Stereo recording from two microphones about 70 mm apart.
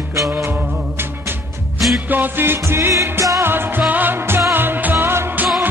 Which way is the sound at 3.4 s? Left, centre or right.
Right.